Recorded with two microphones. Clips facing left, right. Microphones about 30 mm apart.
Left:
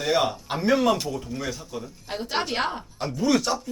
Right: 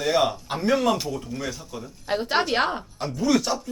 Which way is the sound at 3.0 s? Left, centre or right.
Centre.